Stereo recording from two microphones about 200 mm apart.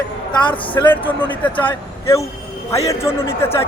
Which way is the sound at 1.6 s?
20° left (ahead or behind).